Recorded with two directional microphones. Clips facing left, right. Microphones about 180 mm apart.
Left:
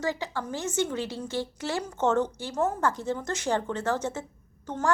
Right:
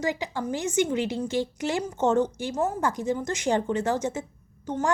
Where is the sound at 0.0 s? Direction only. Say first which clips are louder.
Right 2 dB; 15° right (ahead or behind).